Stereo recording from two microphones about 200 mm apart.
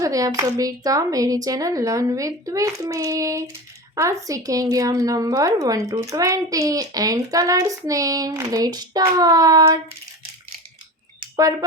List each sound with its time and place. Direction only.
0.0 s speech: 15° right (ahead or behind)